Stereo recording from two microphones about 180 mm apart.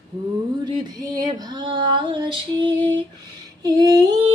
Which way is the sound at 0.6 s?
25° right (ahead or behind).